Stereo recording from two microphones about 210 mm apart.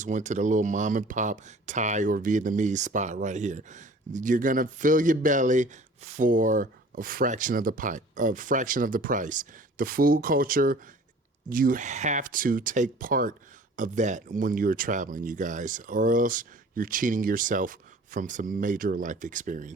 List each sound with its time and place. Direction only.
0.0 s speech: 35° right (ahead or behind)